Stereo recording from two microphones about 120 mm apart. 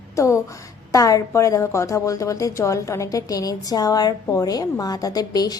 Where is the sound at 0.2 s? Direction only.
25° left (ahead or behind).